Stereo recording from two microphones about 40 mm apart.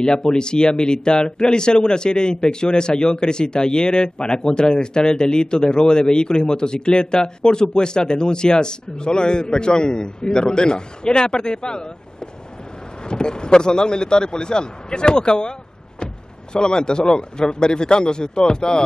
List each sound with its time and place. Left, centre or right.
0.0 s speech: left
16.5 s speech: left